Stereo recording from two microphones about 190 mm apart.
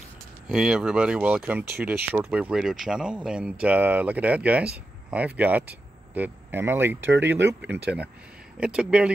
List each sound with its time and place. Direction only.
0.5 s speech: 5° right (ahead or behind)
7.1 s speech: 70° right (ahead or behind)
7.7 s speech: 5° right (ahead or behind)